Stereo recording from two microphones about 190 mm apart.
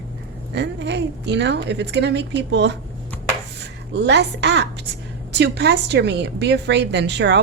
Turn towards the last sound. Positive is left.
turn(degrees=-65)  # may be behind; listen again after turning